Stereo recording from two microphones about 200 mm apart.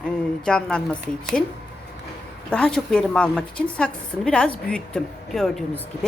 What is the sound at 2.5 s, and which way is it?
A woman's voice, 5° left (ahead or behind).